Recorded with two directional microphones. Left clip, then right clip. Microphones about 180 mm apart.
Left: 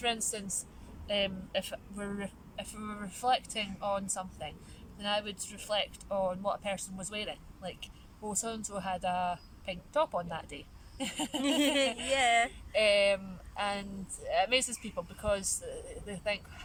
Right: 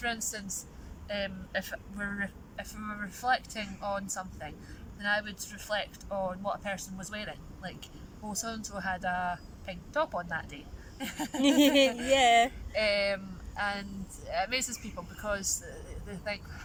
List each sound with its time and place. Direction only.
1.0 s speech: 15° left (ahead or behind)
11.6 s speech: 15° right (ahead or behind)
11.9 s speech: 15° left (ahead or behind)
12.1 s speech: 15° right (ahead or behind)
12.7 s speech: 15° left (ahead or behind)